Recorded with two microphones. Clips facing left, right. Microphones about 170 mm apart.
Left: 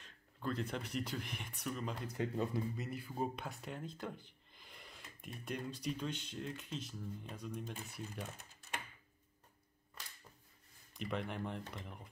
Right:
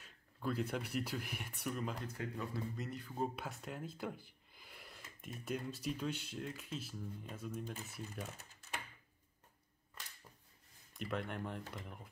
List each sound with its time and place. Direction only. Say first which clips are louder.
0.0 s speech: right 1 dB; 10° right (ahead or behind)
2.1 s speech: left 5 dB; 25° left (ahead or behind)
2.7 s speech: left 1 dB; 5° left (ahead or behind)
11.0 s speech: left 1 dB; centre (ahead or behind)